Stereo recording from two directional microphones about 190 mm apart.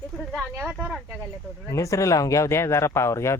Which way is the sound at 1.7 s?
15° left (ahead or behind).